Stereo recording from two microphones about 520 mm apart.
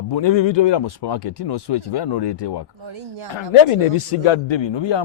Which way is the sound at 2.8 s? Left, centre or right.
Right.